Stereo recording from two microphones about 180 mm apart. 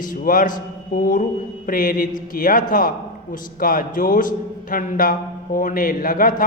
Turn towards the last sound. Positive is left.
turn(degrees=50)  # may be behind; listen again after turning